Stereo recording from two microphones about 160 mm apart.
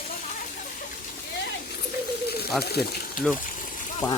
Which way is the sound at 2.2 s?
80° left.